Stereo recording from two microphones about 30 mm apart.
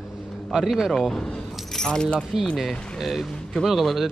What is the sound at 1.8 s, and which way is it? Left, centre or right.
Speech, left.